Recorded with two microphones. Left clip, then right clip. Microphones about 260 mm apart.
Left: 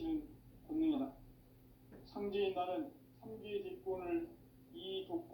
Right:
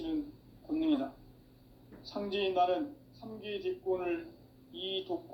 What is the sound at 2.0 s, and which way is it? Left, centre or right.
Speech, right.